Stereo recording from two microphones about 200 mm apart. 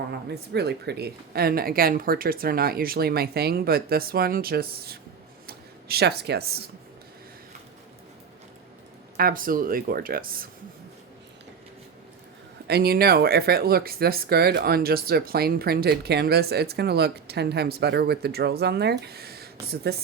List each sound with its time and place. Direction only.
0.1 s speech: 55° right (ahead or behind)
9.1 s speech: 45° right (ahead or behind)
12.6 s speech: 50° right (ahead or behind)